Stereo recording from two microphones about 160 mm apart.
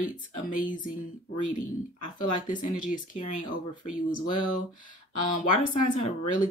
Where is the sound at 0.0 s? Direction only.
55° left (ahead or behind).